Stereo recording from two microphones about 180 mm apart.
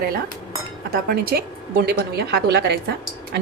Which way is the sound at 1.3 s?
60° right (ahead or behind).